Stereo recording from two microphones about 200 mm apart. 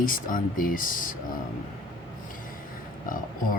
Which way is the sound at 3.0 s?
45° left (ahead or behind).